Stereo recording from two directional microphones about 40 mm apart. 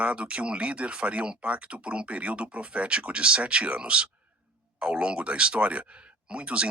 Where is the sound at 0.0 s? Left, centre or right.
Right.